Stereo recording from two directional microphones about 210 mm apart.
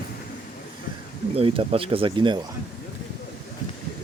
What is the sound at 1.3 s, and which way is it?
Speech, 25° right (ahead or behind).